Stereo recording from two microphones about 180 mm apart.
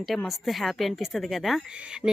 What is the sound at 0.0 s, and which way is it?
A woman's voice, centre (ahead or behind).